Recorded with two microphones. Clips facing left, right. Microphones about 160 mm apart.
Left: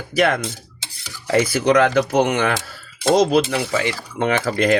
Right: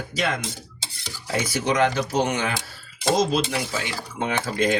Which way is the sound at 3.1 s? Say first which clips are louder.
Left 6 dB; 70° left (ahead or behind).